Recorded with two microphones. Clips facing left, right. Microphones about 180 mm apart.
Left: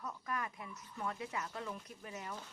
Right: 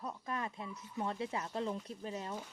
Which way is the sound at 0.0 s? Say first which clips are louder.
Right 2 dB; 25° right (ahead or behind).